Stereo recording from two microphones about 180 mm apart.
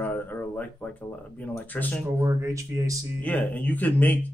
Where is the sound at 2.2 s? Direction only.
15° right (ahead or behind).